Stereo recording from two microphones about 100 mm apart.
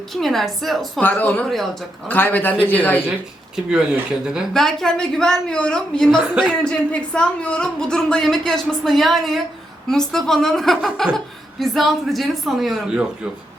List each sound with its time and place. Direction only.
0.1 s speech: centre (ahead or behind)
0.9 s a man's voice: 10° left (ahead or behind)
3.5 s speech: 10° right (ahead or behind)